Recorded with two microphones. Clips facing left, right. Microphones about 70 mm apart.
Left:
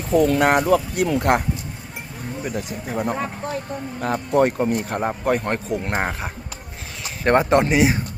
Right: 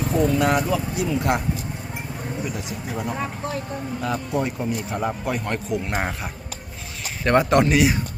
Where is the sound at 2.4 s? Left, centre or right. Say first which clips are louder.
Left 2 dB; left.